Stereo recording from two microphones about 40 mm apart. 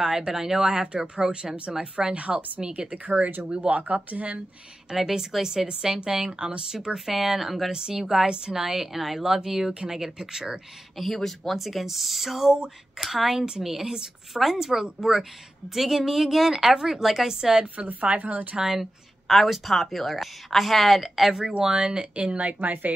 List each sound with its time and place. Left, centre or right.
0.0 s a woman's voice: centre
2.1 s a woman's voice: right
3.8 s a woman's voice: right
4.9 s a woman's voice: centre
7.1 s a woman's voice: centre
7.7 s a woman's voice: centre
11.0 s a woman's voice: centre
17.8 s a woman's voice: right
18.6 s a woman's voice: centre
19.2 s a woman's voice: centre
21.4 s a woman's voice: centre; by 22.7 s right
22.7 s speech: right